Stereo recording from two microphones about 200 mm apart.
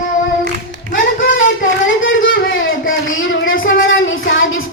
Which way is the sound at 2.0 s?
75° left (ahead or behind).